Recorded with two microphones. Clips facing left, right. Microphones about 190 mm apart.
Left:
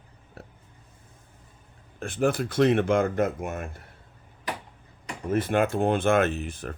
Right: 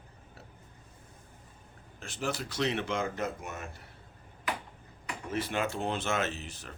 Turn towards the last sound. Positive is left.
turn(degrees=55)  # may be behind; listen again after turning